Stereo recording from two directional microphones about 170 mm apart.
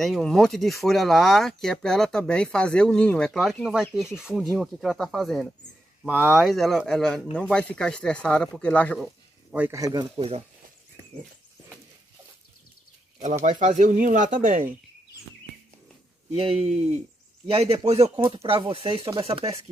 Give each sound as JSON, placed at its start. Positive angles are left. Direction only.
{"t": 0.0, "sound": "speech", "side_deg": 0}
{"t": 9.0, "sound": "speech", "side_deg": -10}
{"t": 10.1, "sound": "speech", "side_deg": -35}
{"t": 13.2, "sound": "speech", "side_deg": -40}
{"t": 16.3, "sound": "speech", "side_deg": -35}